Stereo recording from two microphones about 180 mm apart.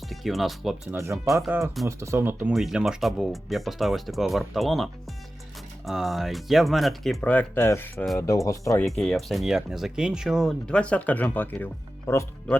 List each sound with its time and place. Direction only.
0.1 s speech: centre (ahead or behind)
0.9 s speech: 15° right (ahead or behind)
2.5 s speech: centre (ahead or behind); by 8.9 s 15° left (ahead or behind)
8.9 s speech: centre (ahead or behind)